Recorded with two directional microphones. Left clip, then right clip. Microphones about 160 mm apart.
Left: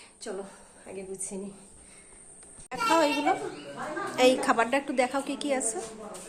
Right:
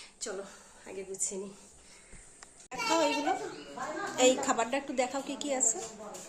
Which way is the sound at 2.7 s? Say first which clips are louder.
Left 5 dB; centre (ahead or behind).